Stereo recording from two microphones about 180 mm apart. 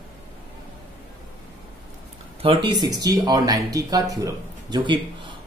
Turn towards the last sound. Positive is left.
turn(degrees=-25)  # may be behind; listen again after turning